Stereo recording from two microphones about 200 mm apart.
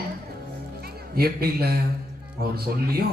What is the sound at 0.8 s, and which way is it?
A man's voice, 50° right (ahead or behind).